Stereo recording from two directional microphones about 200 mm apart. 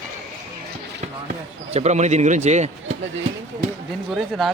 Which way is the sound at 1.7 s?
35° right (ahead or behind).